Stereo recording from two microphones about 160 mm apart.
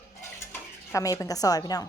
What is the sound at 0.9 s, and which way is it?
Speech, 20° left (ahead or behind).